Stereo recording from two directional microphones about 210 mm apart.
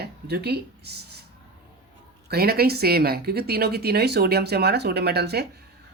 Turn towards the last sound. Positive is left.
turn(degrees=-50)  # may be behind; listen again after turning